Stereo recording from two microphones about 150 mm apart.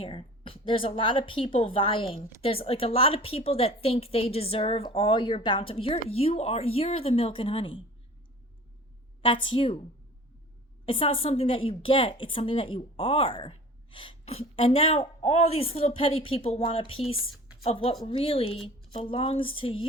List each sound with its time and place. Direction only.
0.0 s a woman's voice: 40° left (ahead or behind)
9.2 s a woman's voice: 35° left (ahead or behind)
10.8 s a woman's voice: 35° left (ahead or behind)